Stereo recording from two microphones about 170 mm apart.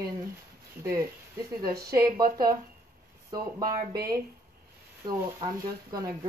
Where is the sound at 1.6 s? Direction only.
65° right (ahead or behind).